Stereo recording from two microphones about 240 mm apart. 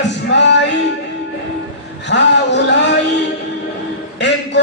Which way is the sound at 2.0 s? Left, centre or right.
Left.